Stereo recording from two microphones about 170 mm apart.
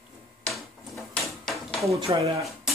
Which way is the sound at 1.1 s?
5° left (ahead or behind).